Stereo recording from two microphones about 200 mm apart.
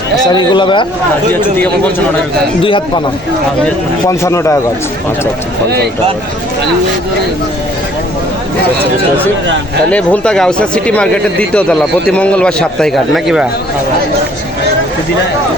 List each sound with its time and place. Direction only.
0.3 s a man's voice: 25° left (ahead or behind)
1.3 s speech: 10° left (ahead or behind)
2.6 s a man's voice: 25° left (ahead or behind)
4.0 s speech: 15° left (ahead or behind)
9.9 s speech: 5° left (ahead or behind)